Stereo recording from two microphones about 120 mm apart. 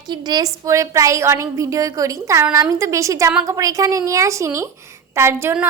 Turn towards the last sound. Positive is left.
turn(degrees=-15)  # may be behind; listen again after turning